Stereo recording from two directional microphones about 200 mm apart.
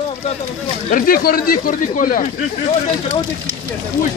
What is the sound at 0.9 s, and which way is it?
A man's voice, 45° left (ahead or behind).